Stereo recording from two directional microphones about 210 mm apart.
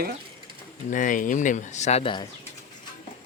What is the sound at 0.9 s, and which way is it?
Speech, 40° left (ahead or behind).